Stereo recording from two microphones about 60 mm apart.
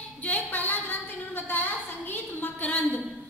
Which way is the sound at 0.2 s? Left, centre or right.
Left.